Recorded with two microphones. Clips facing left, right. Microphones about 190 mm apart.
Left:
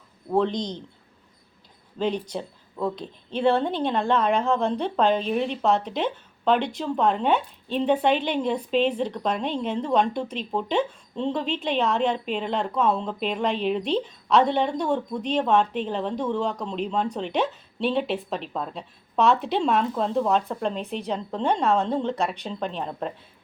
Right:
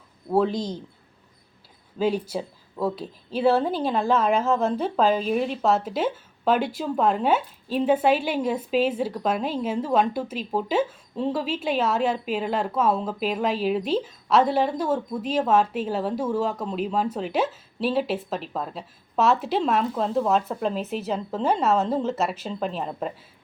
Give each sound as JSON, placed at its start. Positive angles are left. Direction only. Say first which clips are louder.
{"t": 0.3, "sound": "speech", "louder": "right 1 dB", "side_deg": -5}
{"t": 2.0, "sound": "a woman's voice", "louder": "right 2 dB", "side_deg": -5}